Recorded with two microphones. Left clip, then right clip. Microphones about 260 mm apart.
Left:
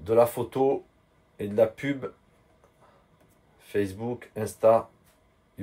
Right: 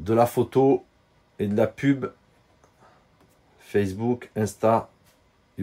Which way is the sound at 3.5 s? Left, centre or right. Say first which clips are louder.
Right 4 dB; right.